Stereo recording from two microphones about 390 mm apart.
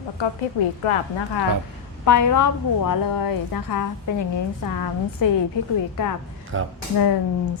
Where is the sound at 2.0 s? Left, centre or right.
Left.